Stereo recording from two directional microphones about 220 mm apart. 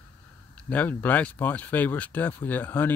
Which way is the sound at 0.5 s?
5° left (ahead or behind).